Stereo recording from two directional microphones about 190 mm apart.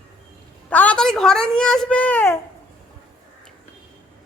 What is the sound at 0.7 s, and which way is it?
Speech, 5° left (ahead or behind).